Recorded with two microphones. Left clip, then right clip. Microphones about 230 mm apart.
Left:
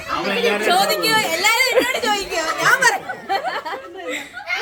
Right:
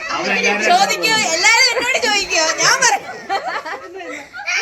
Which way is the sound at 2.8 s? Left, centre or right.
Centre.